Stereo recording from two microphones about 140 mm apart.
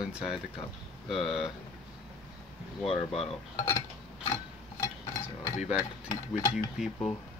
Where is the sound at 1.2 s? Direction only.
5° right (ahead or behind).